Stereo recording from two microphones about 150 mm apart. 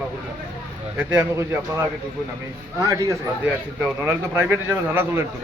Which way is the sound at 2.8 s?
20° right (ahead or behind).